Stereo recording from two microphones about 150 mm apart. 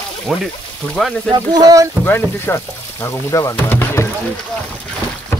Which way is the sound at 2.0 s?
15° left (ahead or behind).